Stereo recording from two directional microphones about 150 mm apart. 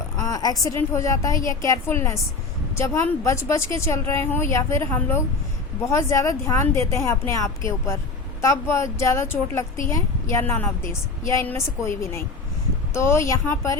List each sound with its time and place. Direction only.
0.2 s a woman's voice: 25° left (ahead or behind)